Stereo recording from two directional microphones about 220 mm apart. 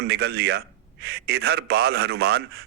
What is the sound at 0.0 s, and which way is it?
A man's voice, 45° right (ahead or behind).